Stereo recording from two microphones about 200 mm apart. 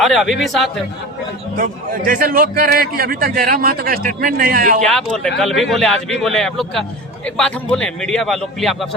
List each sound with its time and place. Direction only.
0.0 s a man's voice: centre (ahead or behind)
1.5 s a man's voice: 45° right (ahead or behind)
4.9 s a man's voice: 5° left (ahead or behind)